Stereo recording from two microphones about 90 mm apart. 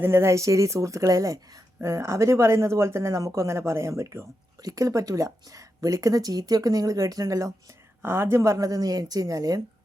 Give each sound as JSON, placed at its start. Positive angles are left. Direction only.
{"t": 0.0, "sound": "speech", "side_deg": -30}
{"t": 8.0, "sound": "a woman's voice", "side_deg": -30}